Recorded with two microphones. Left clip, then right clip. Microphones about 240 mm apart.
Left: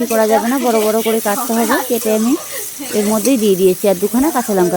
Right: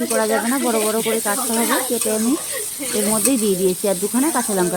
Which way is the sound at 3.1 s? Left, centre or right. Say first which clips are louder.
Left 6 dB; left.